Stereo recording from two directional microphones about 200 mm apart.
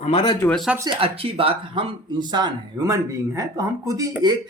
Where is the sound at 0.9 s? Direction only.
30° right (ahead or behind).